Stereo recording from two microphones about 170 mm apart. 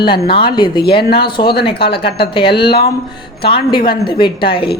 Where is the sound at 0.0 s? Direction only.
30° left (ahead or behind).